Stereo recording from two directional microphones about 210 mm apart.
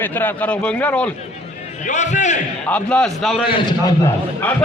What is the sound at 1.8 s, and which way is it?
Speech, 35° left (ahead or behind).